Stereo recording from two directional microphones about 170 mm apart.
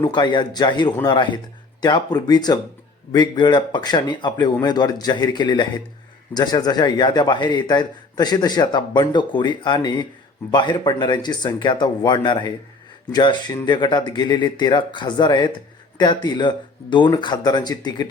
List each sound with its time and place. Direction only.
0.0 s a man's voice: 25° left (ahead or behind)